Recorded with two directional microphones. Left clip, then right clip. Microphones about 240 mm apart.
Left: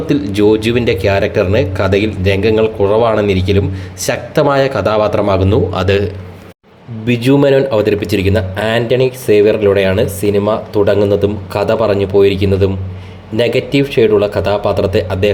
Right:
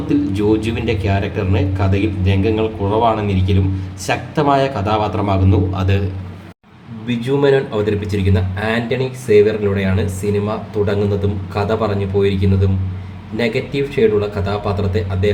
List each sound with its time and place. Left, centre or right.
0.1 s speech: left